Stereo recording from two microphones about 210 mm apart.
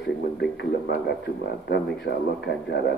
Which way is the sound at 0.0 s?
50° left (ahead or behind).